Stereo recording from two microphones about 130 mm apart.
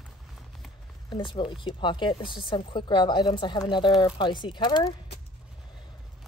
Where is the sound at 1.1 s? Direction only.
40° left (ahead or behind).